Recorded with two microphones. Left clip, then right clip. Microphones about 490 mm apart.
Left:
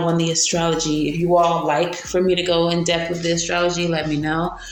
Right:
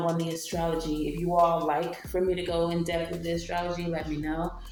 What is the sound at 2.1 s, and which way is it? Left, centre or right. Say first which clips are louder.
Speech: left 9 dB; centre.